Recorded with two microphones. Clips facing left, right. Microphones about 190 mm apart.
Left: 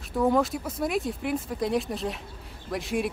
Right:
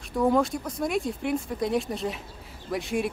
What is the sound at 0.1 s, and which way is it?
Speech, centre (ahead or behind).